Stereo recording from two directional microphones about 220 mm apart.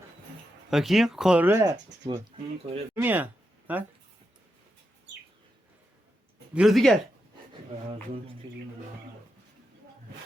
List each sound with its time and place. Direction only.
0.7 s speech: centre (ahead or behind)
2.0 s speech: 25° right (ahead or behind)
2.9 s speech: 10° right (ahead or behind)
6.5 s speech: centre (ahead or behind)
8.4 s speech: 25° right (ahead or behind)